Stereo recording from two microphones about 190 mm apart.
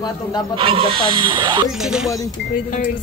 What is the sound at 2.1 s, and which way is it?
Speech, 20° left (ahead or behind).